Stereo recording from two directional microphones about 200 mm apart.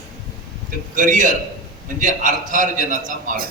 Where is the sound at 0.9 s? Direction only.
40° right (ahead or behind).